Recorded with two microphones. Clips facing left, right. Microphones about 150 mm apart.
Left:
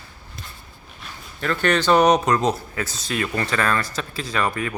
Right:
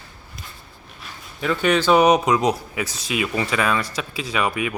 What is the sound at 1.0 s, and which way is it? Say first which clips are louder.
Speech: right 1 dB; 5° right (ahead or behind).